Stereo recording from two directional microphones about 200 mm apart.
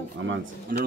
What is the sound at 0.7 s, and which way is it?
Speech, 45° right (ahead or behind).